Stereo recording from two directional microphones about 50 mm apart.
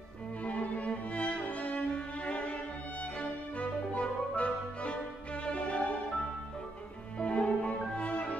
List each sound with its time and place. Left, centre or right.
0.4 s music: left
7.2 s music: centre